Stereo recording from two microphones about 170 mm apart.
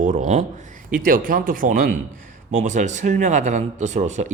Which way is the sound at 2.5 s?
45° right (ahead or behind).